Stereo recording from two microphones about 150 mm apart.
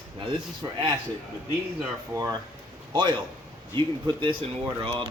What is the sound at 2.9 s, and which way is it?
A man's voice, 30° right (ahead or behind).